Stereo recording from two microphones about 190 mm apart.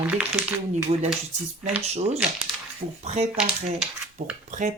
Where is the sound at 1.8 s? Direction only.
35° right (ahead or behind).